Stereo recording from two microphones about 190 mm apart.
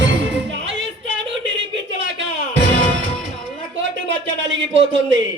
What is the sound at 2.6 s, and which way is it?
Music, 70° right (ahead or behind).